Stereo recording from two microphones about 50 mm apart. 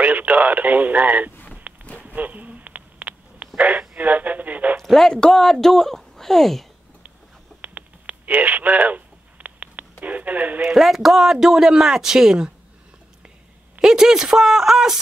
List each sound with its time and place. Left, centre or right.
0.0 s speech: right
1.9 s a sound: left
2.1 s a sound: right
3.9 s speech: right
4.7 s speech: centre
7.6 s telephone: right
10.0 s speech: right
10.6 s speech: centre
13.7 s speech: centre